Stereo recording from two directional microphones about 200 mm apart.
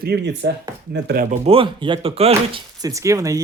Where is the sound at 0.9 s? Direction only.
55° right (ahead or behind).